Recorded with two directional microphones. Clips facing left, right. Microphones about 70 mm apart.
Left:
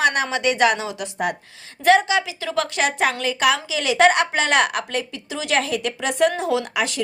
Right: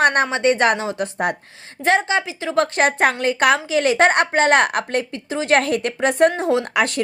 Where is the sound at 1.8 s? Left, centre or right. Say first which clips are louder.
Left 2 dB; right.